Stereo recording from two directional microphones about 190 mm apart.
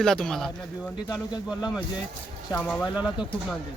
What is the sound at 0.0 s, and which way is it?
Speech, 5° left (ahead or behind).